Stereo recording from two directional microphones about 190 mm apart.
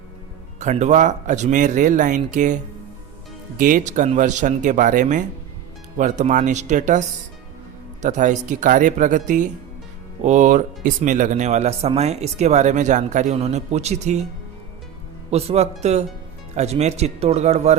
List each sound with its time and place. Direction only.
0.6 s speech: 40° right (ahead or behind)
3.6 s speech: 45° right (ahead or behind)
8.0 s speech: 40° right (ahead or behind)
15.3 s speech: 35° right (ahead or behind)